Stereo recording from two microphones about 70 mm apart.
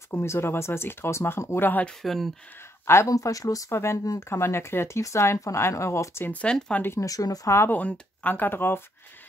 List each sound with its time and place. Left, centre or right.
0.1 s speech: left
1.9 s speech: centre
2.8 s speech: left
3.1 s speech: left
3.7 s speech: left
6.3 s speech: centre
7.0 s speech: left
7.7 s speech: left